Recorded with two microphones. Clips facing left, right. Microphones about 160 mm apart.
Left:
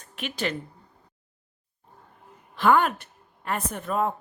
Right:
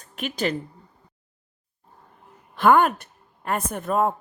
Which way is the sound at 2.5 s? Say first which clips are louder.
Right 3 dB; 50° right (ahead or behind).